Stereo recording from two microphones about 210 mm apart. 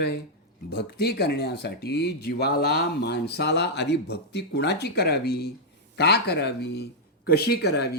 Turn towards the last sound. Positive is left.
turn(degrees=50)  # may be behind; listen again after turning